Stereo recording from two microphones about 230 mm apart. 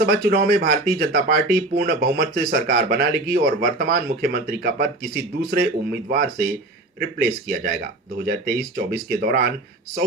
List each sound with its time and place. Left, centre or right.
0.0 s speech: right